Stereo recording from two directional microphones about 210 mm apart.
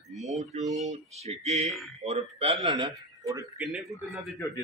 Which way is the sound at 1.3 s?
30° right (ahead or behind).